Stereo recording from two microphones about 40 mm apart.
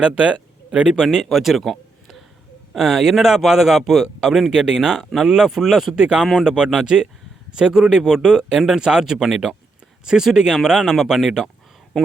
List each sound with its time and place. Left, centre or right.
0.0 s speech: right
1.2 s speech: centre
2.7 s a man's voice: centre
6.0 s a man's voice: right
11.9 s speech: centre